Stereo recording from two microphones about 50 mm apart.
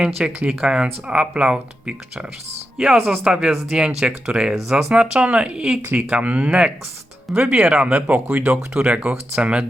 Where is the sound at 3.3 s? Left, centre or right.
Centre.